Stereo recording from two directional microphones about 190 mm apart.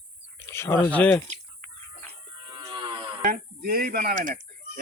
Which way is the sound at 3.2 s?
50° right (ahead or behind).